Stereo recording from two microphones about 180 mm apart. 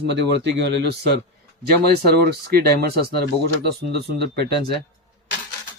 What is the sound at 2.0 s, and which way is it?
Speech, 65° right (ahead or behind).